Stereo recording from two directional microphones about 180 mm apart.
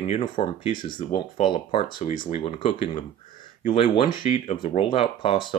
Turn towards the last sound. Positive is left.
turn(degrees=30)  # may be behind; listen again after turning